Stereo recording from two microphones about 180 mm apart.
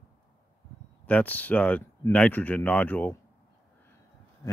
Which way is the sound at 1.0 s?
10° left (ahead or behind).